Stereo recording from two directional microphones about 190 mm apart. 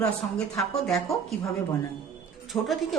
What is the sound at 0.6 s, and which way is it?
A woman's voice, centre (ahead or behind).